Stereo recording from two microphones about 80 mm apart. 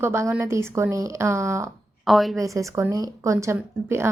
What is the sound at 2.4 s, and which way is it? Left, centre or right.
Speech, right.